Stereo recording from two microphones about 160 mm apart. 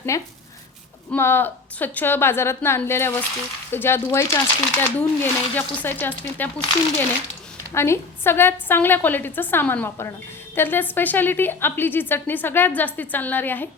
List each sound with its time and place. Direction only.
0.1 s a woman's voice: 20° left (ahead or behind)
7.7 s a woman's voice: 15° left (ahead or behind)